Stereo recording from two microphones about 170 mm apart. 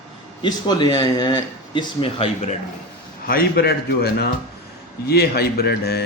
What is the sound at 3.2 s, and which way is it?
Speech, 65° left (ahead or behind).